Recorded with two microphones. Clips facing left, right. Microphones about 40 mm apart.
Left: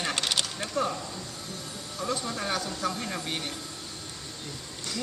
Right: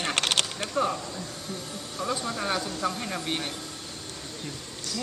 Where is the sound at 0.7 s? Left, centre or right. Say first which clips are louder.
Right 2 dB; centre.